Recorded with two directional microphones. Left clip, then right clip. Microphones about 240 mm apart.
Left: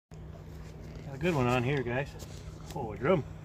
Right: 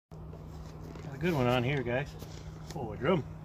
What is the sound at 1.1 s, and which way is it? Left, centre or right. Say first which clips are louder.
Speech: even; centre.